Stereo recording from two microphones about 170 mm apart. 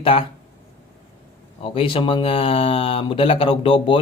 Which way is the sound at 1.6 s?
30° left (ahead or behind).